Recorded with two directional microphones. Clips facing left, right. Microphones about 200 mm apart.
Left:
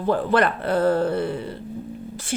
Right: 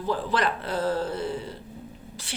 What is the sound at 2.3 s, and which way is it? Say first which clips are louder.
Speech: left 11 dB; 50° left (ahead or behind).